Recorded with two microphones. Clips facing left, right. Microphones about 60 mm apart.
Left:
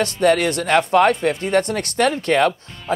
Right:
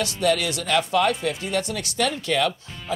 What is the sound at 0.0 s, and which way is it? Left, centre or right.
Speech, left.